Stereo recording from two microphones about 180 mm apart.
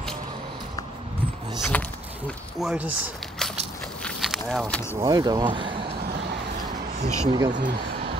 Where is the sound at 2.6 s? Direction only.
10° right (ahead or behind).